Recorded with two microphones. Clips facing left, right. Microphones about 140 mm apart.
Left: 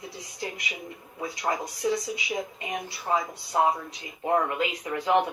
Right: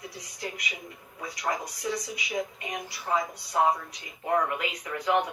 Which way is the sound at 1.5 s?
25° left (ahead or behind).